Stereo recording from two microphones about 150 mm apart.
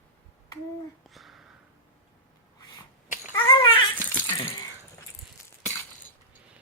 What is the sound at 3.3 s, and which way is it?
Babbling, 35° left (ahead or behind).